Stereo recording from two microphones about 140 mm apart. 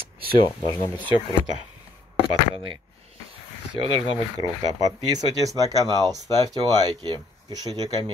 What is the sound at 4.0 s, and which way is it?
Speech, 30° left (ahead or behind).